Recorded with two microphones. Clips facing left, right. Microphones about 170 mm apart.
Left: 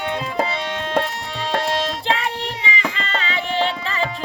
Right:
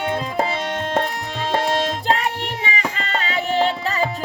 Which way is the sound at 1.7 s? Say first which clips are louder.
Right 2 dB; 45° right (ahead or behind).